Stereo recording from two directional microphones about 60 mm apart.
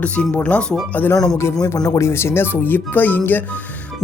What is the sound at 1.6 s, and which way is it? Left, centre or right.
Speech, left.